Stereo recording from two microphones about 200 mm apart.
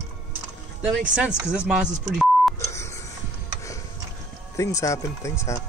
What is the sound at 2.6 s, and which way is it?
Telephone dialing, 15° left (ahead or behind).